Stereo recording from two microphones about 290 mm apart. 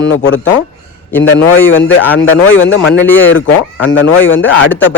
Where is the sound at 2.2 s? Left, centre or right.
Left.